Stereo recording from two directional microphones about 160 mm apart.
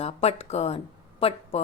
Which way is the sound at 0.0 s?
40° left (ahead or behind).